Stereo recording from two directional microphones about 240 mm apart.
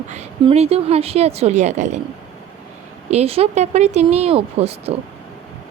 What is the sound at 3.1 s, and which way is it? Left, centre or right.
Speech, right.